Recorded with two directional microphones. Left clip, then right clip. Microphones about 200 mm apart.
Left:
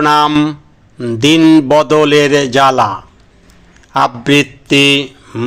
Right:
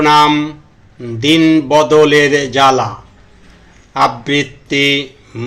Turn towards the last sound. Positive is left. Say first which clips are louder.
# left 3 dB
turn(degrees=15)  # may be behind; listen again after turning